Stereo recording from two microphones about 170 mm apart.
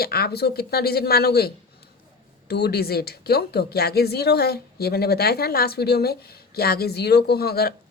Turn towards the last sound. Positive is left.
turn(degrees=65)  # may be behind; listen again after turning